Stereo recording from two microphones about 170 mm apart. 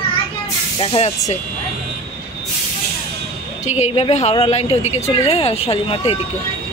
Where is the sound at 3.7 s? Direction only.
40° left (ahead or behind).